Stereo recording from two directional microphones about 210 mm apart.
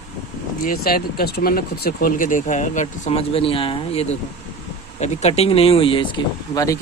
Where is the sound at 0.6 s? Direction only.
45° left (ahead or behind).